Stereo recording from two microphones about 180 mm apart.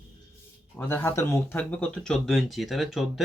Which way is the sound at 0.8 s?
10° left (ahead or behind).